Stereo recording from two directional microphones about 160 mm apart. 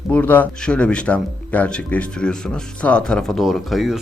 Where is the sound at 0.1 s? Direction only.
10° left (ahead or behind).